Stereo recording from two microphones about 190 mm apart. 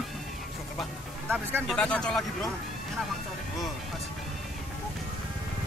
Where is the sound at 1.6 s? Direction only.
5° left (ahead or behind).